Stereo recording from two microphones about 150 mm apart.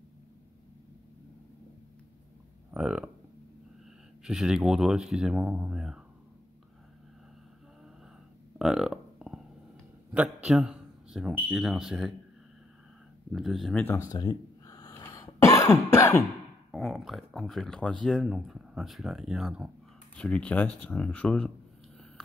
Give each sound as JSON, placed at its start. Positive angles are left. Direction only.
{"t": 2.7, "sound": "speech", "side_deg": -5}
{"t": 4.2, "sound": "speech", "side_deg": -5}
{"t": 8.5, "sound": "music", "side_deg": -5}
{"t": 10.1, "sound": "a man's voice", "side_deg": -5}
{"t": 13.3, "sound": "speech", "side_deg": 0}
{"t": 14.1, "sound": "cough", "side_deg": 25}
{"t": 16.7, "sound": "speech", "side_deg": 0}